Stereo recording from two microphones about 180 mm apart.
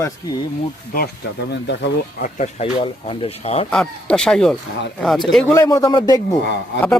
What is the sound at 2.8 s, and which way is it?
Speech, 30° left (ahead or behind).